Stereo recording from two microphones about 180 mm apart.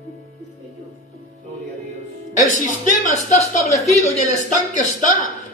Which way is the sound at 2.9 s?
40° left (ahead or behind).